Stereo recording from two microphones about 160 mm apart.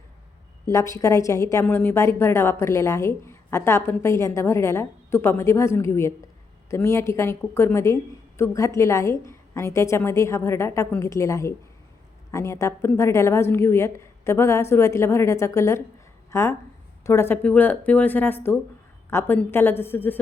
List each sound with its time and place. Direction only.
0.7 s a woman's voice: 20° left (ahead or behind)